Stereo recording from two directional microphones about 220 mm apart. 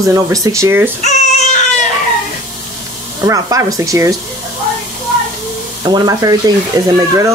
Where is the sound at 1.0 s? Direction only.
35° left (ahead or behind).